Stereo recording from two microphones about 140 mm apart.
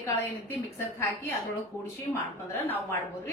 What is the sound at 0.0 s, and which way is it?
A woman's voice, 15° left (ahead or behind).